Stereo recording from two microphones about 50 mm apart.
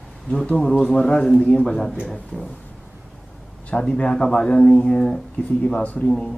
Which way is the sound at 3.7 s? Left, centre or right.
Centre.